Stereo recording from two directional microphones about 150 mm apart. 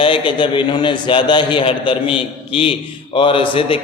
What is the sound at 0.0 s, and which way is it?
Mantra, 35° left (ahead or behind).